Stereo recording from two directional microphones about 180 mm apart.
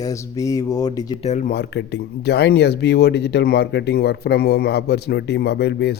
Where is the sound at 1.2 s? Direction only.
40° left (ahead or behind).